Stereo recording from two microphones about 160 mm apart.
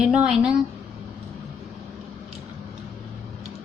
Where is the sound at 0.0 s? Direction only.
5° right (ahead or behind).